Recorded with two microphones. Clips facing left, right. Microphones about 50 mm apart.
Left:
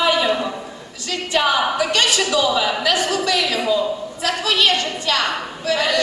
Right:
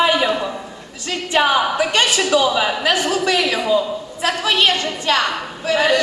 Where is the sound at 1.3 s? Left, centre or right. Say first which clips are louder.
Right 2 dB; right.